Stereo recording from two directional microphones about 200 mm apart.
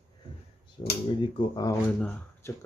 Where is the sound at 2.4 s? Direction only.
15° left (ahead or behind).